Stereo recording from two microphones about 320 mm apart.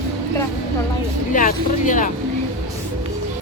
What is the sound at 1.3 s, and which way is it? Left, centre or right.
Speech, left.